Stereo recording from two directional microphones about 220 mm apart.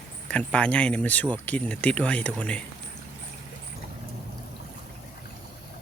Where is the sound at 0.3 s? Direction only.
5° left (ahead or behind).